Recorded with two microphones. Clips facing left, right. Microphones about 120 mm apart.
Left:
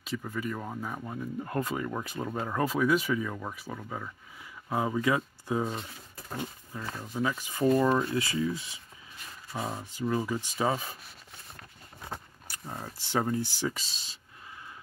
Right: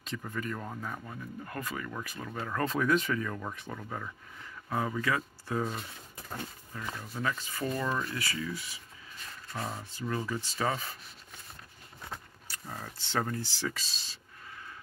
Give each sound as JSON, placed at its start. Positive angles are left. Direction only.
{"t": 0.0, "sound": "speech", "side_deg": 5}
{"t": 1.0, "sound": "speech", "side_deg": 25}
{"t": 2.6, "sound": "speech", "side_deg": 5}
{"t": 4.6, "sound": "speech", "side_deg": 15}
{"t": 8.0, "sound": "speech", "side_deg": 25}
{"t": 9.5, "sound": "speech", "side_deg": 10}
{"t": 12.1, "sound": "speech", "side_deg": 20}